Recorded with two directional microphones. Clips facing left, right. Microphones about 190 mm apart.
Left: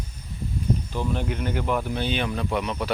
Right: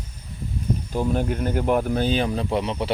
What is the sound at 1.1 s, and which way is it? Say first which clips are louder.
Speech: right 4 dB; 45° right (ahead or behind).